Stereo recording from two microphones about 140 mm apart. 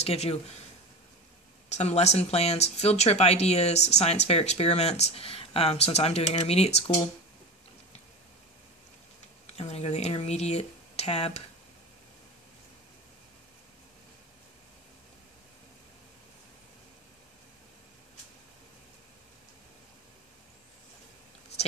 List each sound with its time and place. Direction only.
0.0 s speech: 45° left (ahead or behind)
1.7 s speech: 50° left (ahead or behind)
9.6 s speech: 50° left (ahead or behind)